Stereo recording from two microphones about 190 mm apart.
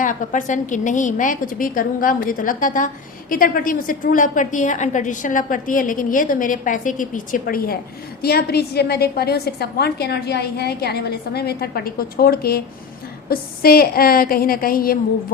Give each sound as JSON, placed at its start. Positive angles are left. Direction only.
{"t": 0.0, "sound": "a woman's voice", "side_deg": 40}